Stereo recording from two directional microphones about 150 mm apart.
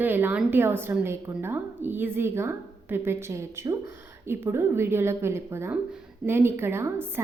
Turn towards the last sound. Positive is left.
turn(degrees=-15)  # may be behind; listen again after turning